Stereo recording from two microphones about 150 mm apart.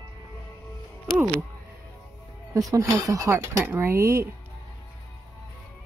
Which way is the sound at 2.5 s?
20° right (ahead or behind).